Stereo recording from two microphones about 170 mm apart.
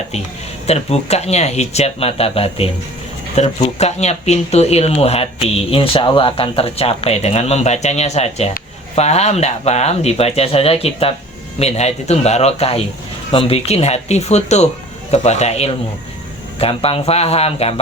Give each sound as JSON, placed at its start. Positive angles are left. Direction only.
{"t": 0.7, "sound": "speech", "side_deg": 40}